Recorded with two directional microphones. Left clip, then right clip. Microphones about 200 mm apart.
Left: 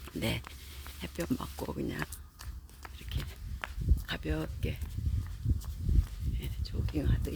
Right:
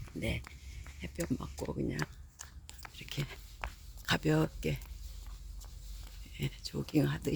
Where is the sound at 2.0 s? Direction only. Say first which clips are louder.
Left 1 dB; 15° right (ahead or behind).